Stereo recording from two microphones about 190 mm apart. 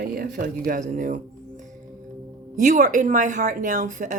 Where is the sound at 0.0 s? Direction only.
50° right (ahead or behind).